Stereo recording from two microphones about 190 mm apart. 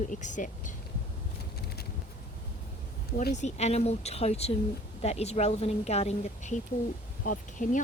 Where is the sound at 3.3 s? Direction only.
35° left (ahead or behind).